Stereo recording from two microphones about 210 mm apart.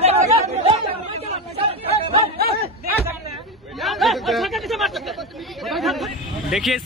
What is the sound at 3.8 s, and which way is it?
Speech, centre (ahead or behind).